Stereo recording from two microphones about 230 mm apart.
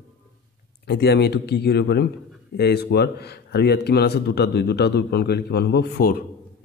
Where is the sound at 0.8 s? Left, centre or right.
Left.